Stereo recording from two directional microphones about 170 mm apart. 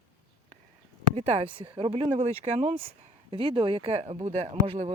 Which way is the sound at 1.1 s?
40° right (ahead or behind).